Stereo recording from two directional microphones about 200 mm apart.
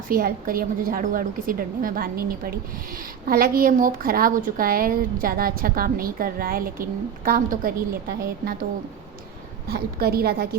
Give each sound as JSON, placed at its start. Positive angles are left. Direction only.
{"t": 0.1, "sound": "a woman's voice", "side_deg": -45}
{"t": 9.6, "sound": "a woman's voice", "side_deg": -50}